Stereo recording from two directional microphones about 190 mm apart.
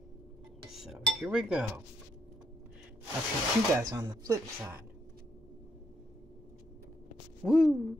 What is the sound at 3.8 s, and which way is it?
Speech, 20° right (ahead or behind).